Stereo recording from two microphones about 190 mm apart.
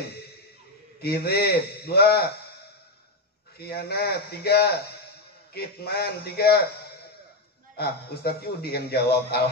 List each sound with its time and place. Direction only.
1.0 s a man's voice: 55° left (ahead or behind)
3.5 s a man's voice: 55° left (ahead or behind)
7.7 s a man's voice: 55° left (ahead or behind)